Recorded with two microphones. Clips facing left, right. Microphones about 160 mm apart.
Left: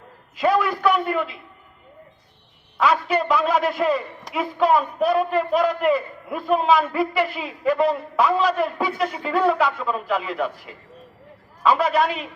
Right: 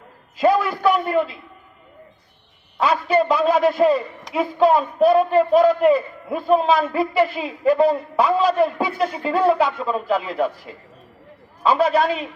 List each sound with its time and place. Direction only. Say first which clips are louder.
0.3 s a man's voice: right 2 dB; 35° right (ahead or behind)
2.7 s a man's voice: right 2 dB; 30° right (ahead or behind)